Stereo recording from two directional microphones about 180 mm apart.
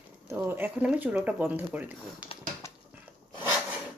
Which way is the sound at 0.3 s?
10° right (ahead or behind).